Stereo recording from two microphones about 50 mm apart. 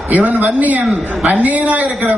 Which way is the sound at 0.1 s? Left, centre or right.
Right.